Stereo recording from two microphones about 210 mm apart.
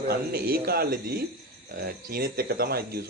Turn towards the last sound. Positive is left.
turn(degrees=-45)  # may be behind; listen again after turning